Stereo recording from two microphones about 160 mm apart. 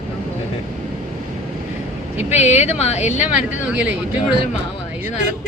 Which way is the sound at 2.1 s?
45° left (ahead or behind).